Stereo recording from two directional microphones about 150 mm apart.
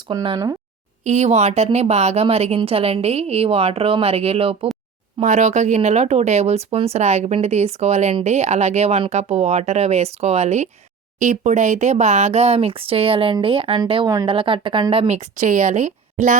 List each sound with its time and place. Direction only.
0.1 s speech: 30° right (ahead or behind)
1.0 s speech: 50° right (ahead or behind)
5.2 s speech: 50° right (ahead or behind)